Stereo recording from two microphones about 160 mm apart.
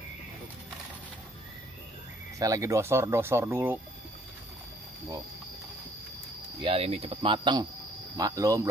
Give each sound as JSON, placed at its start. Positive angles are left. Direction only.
{"t": 2.3, "sound": "speech", "side_deg": -20}
{"t": 6.6, "sound": "speech", "side_deg": -35}